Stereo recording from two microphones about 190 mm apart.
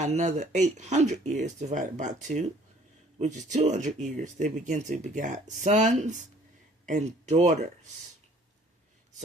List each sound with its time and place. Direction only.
0.0 s speech: 35° right (ahead or behind)